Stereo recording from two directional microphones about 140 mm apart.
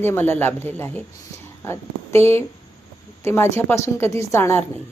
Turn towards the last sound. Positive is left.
turn(degrees=20)  # may be behind; listen again after turning